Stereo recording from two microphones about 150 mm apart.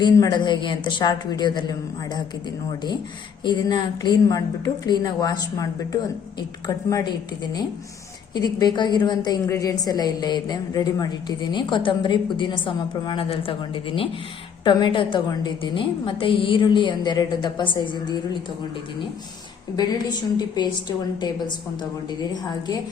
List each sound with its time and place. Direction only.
0.0 s a woman's voice: 30° left (ahead or behind)
3.4 s a woman's voice: 30° left (ahead or behind)
8.4 s a woman's voice: 25° left (ahead or behind)
19.7 s a woman's voice: 25° left (ahead or behind)
22.3 s a woman's voice: 25° left (ahead or behind)